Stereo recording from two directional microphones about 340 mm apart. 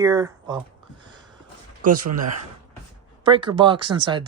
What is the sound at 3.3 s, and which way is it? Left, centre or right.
Speech, centre.